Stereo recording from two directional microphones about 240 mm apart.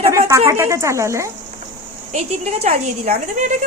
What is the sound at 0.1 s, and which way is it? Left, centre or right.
Speech, centre.